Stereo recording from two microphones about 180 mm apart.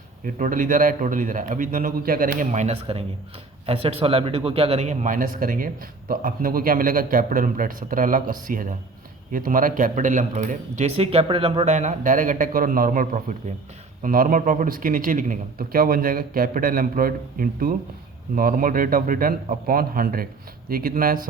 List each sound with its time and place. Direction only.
0.3 s a man's voice: 50° right (ahead or behind)